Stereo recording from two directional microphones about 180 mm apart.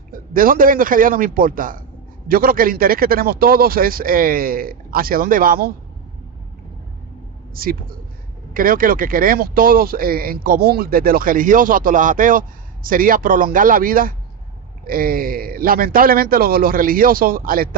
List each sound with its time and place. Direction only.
0.1 s speech: 50° right (ahead or behind)
7.5 s speech: 55° right (ahead or behind)